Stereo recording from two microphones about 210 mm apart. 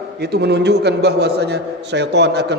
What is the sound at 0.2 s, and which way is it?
A man's voice, 50° right (ahead or behind).